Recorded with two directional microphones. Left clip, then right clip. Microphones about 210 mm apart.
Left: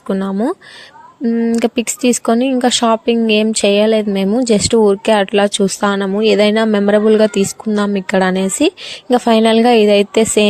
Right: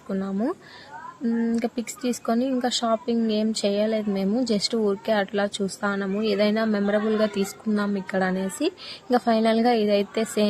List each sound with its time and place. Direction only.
0.1 s speech: 30° left (ahead or behind)
1.5 s speech: 35° left (ahead or behind)